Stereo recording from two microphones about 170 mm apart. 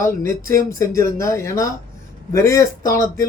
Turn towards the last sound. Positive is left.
turn(degrees=15)  # may be behind; listen again after turning